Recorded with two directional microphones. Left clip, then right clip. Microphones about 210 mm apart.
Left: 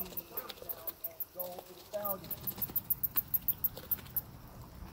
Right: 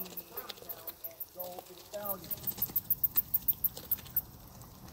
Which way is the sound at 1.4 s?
45° left (ahead or behind).